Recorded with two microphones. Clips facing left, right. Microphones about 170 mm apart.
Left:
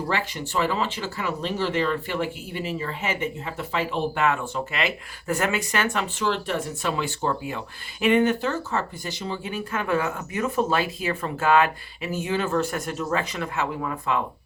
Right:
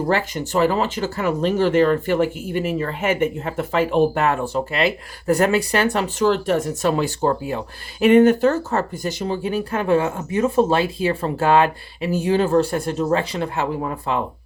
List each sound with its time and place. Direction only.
0.1 s speech: 45° right (ahead or behind)